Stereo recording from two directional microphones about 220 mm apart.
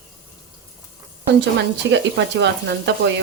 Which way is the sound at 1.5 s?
50° right (ahead or behind).